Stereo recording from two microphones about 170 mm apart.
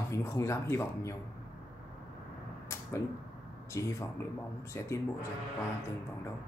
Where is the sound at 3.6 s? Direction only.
15° left (ahead or behind).